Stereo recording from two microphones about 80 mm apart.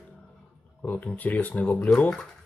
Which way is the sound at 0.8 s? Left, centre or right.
Centre.